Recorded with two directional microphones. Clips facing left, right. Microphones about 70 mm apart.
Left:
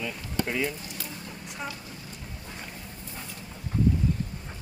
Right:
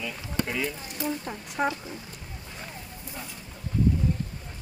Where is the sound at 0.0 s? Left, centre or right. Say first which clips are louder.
Even; centre.